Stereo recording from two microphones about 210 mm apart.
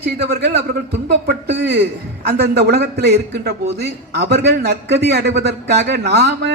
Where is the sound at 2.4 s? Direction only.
50° right (ahead or behind).